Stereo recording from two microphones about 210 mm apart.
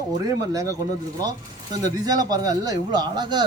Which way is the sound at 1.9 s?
20° right (ahead or behind).